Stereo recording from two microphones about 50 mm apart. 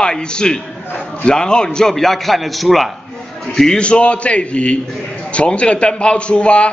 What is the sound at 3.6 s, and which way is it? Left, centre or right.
A man's voice, centre.